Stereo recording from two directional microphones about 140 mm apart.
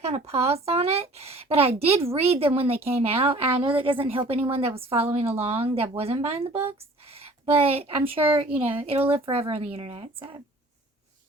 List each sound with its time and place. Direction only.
0.0 s a woman's voice: 50° right (ahead or behind)